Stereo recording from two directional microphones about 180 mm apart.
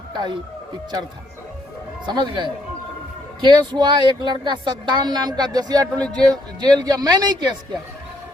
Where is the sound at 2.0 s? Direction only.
25° right (ahead or behind).